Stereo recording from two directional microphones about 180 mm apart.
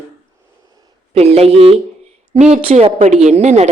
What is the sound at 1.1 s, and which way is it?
A woman's voice, 35° right (ahead or behind).